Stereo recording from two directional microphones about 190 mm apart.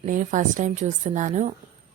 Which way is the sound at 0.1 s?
40° right (ahead or behind).